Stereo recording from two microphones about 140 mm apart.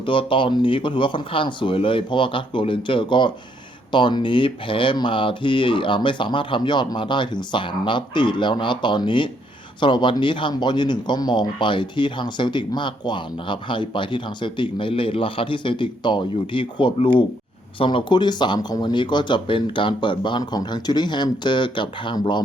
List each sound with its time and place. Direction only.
0.0 s speech: 35° left (ahead or behind)